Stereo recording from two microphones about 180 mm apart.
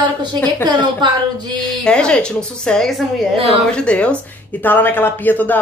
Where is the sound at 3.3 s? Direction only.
30° right (ahead or behind).